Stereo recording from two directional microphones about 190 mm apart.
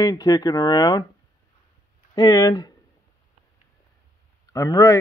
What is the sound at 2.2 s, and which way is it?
Speech, 20° left (ahead or behind).